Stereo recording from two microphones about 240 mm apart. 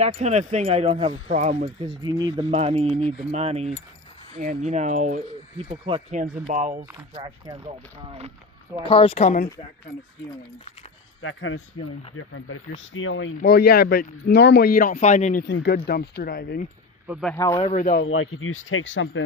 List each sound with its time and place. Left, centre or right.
0.0 s speech: right
6.9 s speech: centre
8.8 s a woman's voice: left
11.2 s speech: left
15.4 s speech: left
17.1 s speech: centre
17.3 s speech: centre
17.7 s speech: left
18.0 s speech: left